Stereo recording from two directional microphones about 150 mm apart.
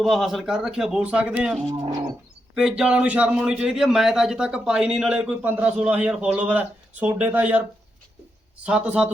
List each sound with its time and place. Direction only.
0.0 s a man's voice: centre (ahead or behind)
2.6 s a man's voice: 5° right (ahead or behind)
8.6 s a man's voice: 10° right (ahead or behind)